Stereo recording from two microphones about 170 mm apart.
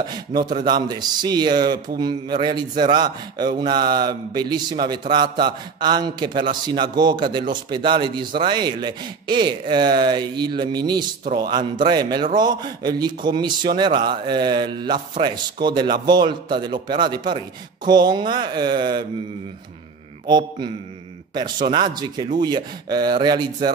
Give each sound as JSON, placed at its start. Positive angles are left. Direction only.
{"t": 0.3, "sound": "a sound", "side_deg": -55}
{"t": 0.6, "sound": "a man's voice", "side_deg": -25}
{"t": 20.2, "sound": "a man's voice", "side_deg": -25}